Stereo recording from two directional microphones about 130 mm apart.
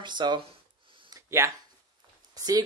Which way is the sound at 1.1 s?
20° right (ahead or behind).